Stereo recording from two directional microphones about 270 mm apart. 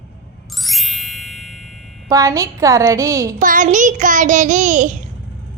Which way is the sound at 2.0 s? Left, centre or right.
Centre.